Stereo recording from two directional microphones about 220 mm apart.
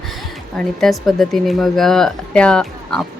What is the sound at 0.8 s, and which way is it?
Speech, centre (ahead or behind).